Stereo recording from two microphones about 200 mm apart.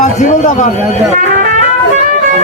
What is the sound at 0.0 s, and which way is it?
Speech, 40° left (ahead or behind).